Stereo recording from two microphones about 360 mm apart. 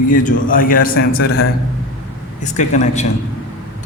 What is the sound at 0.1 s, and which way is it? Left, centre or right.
A man's voice, left.